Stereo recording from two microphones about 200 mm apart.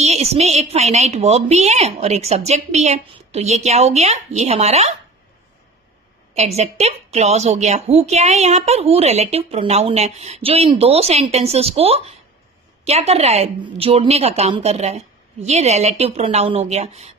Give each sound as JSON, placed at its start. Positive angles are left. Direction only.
{"t": 0.0, "sound": "a woman's voice", "side_deg": -30}
{"t": 6.3, "sound": "a woman's voice", "side_deg": -35}